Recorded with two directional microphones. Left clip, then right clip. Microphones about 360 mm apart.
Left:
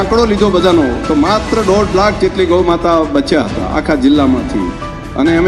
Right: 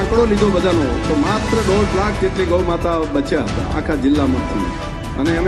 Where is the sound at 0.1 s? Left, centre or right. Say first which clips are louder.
Left 3 dB; left.